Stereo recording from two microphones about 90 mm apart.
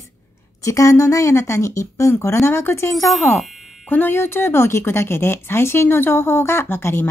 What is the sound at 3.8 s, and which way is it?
A woman's voice, 20° left (ahead or behind).